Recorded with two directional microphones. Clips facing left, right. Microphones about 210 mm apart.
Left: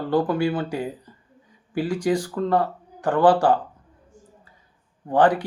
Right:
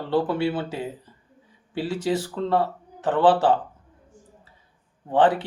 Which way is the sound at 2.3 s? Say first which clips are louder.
Left 1 dB; 25° right (ahead or behind).